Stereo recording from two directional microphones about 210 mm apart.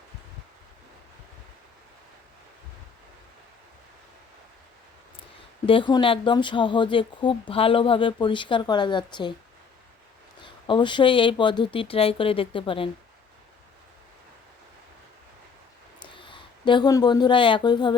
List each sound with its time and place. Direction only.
5.6 s speech: 25° left (ahead or behind)
10.7 s speech: 20° left (ahead or behind)
16.0 s speech: 25° left (ahead or behind)